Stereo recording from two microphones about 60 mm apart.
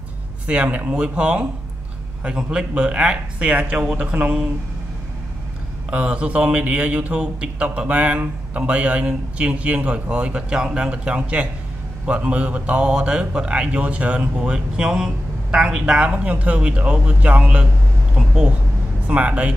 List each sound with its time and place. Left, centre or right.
0.5 s a man's voice: right
5.9 s a man's voice: centre
18.1 s a sound: centre
19.0 s a man's voice: right